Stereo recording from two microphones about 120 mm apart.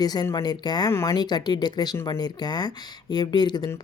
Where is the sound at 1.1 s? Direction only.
35° left (ahead or behind).